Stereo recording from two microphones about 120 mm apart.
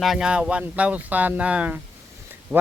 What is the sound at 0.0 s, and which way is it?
Speech, 5° right (ahead or behind).